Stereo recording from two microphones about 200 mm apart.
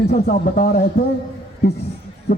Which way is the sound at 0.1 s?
40° left (ahead or behind).